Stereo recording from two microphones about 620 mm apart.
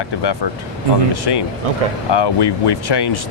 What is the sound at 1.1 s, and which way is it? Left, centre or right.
Speech, left.